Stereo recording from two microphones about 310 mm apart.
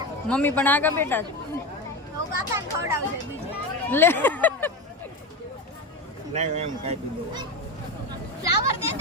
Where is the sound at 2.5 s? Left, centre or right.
Centre.